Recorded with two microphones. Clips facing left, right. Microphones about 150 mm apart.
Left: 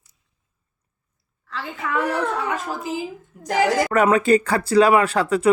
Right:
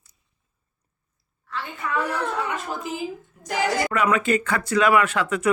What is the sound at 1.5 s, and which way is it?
Speech, 90° left.